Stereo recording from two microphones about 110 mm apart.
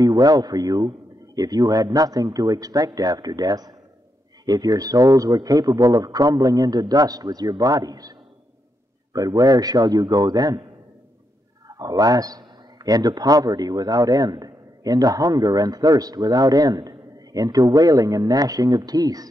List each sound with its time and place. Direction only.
0.0 s a man's voice: 35° right (ahead or behind)
11.6 s a man's voice: 35° right (ahead or behind)